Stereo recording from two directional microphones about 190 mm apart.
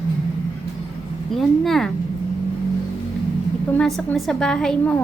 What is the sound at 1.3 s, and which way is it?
Speech, centre (ahead or behind).